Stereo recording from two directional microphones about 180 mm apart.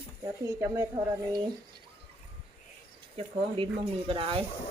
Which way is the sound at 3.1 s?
30° right (ahead or behind).